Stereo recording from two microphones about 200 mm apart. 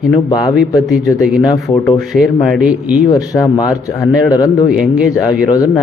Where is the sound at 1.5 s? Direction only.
15° left (ahead or behind).